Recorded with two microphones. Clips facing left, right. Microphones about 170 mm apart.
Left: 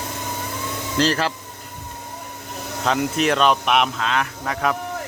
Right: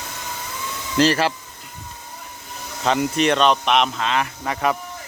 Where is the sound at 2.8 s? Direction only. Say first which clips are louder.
Right 1 dB; centre (ahead or behind).